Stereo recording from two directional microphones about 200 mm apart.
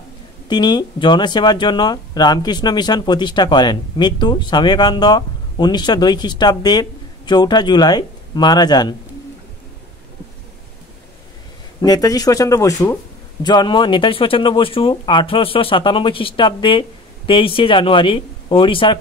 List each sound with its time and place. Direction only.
0.5 s speech: 20° left (ahead or behind)
11.8 s speech: 20° left (ahead or behind)